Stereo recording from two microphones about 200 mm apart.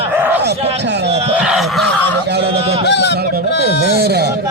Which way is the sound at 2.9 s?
60° left (ahead or behind).